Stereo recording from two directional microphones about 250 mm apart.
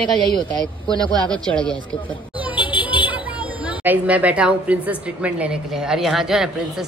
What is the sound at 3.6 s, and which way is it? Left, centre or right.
A woman's voice, centre.